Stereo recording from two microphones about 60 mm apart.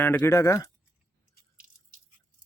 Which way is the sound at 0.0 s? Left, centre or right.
Left.